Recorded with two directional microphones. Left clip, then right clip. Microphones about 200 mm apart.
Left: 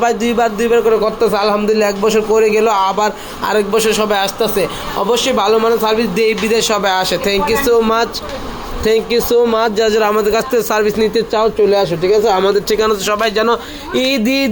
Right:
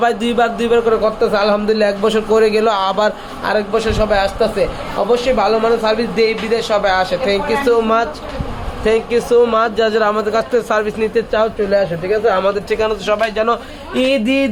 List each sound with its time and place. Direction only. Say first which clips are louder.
0.0 s a man's voice: left 1 dB; 5° right (ahead or behind)
3.4 s a man's voice: left 3 dB; 25° left (ahead or behind)
11.7 s a man's voice: left 3 dB; 40° left (ahead or behind); by 14.5 s 25° left (ahead or behind)